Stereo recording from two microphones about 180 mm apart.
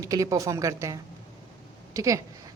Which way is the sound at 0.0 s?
20° right (ahead or behind).